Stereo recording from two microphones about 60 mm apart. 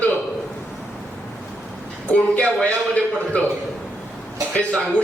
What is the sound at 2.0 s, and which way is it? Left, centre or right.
Speech, left.